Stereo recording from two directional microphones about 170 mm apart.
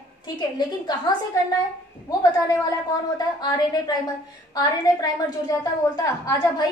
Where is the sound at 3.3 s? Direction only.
25° left (ahead or behind).